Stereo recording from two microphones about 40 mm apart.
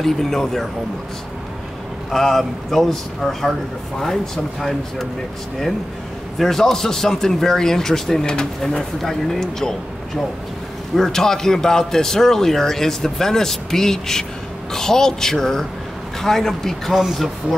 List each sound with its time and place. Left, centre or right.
0.0 s a man's voice: centre
2.0 s a man's voice: centre
6.3 s a man's voice: centre
9.0 s a man's voice: centre
11.0 s a man's voice: centre
16.9 s a man's voice: centre